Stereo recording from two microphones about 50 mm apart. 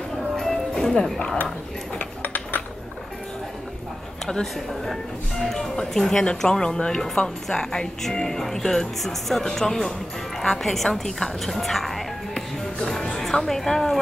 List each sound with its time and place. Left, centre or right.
0.4 s music: centre
2.0 s cutlery: left
4.3 s a woman's voice: centre